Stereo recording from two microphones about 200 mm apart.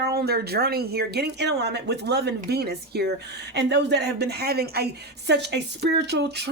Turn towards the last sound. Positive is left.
turn(degrees=-55)  # may be behind; listen again after turning